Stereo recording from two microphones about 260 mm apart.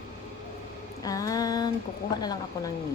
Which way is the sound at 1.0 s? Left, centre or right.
Centre.